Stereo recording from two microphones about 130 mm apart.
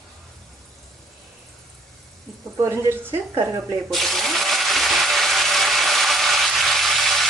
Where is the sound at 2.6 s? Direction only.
15° right (ahead or behind).